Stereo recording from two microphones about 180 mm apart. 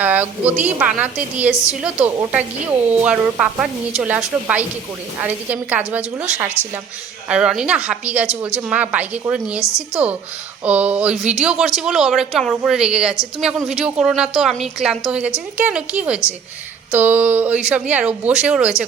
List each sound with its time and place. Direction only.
0.0 s a woman's voice: 10° right (ahead or behind)
9.6 s a woman's voice: 15° left (ahead or behind)
10.6 s a woman's voice: 10° right (ahead or behind)